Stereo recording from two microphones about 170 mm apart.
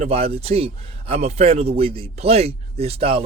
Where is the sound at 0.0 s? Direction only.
35° right (ahead or behind).